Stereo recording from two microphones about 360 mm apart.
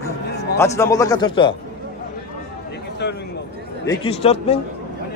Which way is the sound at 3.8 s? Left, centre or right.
Centre.